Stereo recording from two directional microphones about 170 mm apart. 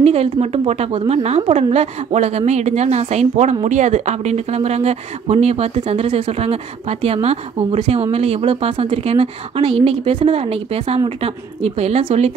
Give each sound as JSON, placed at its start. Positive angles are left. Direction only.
{"t": 0.0, "sound": "speech", "side_deg": -35}